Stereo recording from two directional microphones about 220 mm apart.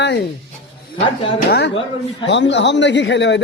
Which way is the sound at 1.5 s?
50° left (ahead or behind).